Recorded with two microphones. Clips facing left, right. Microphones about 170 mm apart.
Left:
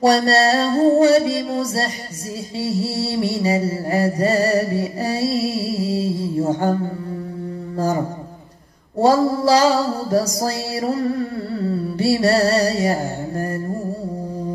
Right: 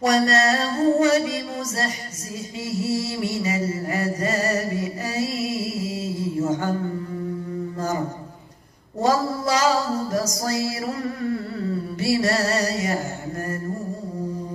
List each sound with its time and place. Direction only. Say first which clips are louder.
0.0 s music: left 4 dB; 35° left (ahead or behind)
9.0 s music: left 6 dB; 35° left (ahead or behind)